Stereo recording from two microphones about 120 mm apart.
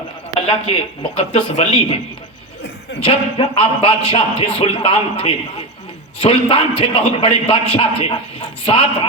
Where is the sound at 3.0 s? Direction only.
50° left (ahead or behind).